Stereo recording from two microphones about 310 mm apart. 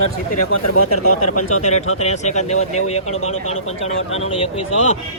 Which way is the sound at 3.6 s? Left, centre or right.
Left.